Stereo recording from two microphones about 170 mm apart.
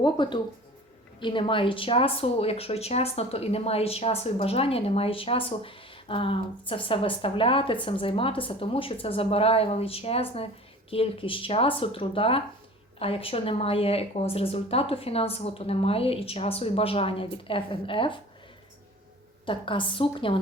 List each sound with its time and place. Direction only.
0.0 s speech: 25° left (ahead or behind)
19.5 s speech: 30° left (ahead or behind)